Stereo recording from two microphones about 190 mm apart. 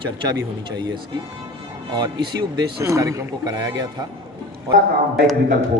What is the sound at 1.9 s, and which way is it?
Speech, 25° right (ahead or behind).